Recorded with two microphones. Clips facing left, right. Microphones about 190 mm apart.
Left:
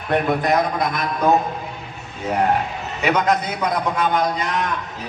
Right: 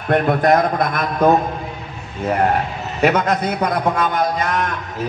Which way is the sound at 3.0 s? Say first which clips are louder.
Right 3 dB; 50° right (ahead or behind).